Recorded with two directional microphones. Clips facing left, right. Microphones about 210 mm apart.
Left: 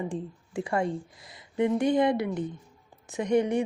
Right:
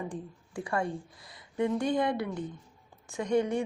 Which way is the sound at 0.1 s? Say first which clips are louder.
Left 5 dB; 25° left (ahead or behind).